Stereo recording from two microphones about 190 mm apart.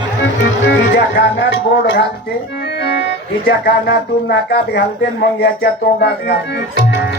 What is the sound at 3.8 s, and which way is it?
Speech, 60° left (ahead or behind).